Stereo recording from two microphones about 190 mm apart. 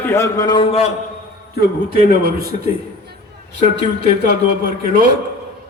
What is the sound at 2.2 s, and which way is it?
Speech, 55° right (ahead or behind).